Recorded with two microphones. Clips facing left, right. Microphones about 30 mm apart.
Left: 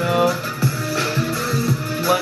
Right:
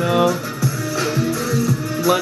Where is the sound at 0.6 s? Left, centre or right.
Left.